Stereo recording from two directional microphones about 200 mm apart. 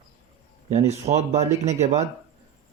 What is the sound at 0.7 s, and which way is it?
Speech, 35° right (ahead or behind).